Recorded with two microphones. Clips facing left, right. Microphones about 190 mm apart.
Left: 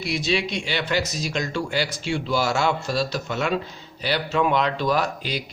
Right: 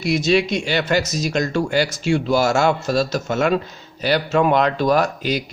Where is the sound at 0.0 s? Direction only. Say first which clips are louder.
Right 7 dB; 45° right (ahead or behind).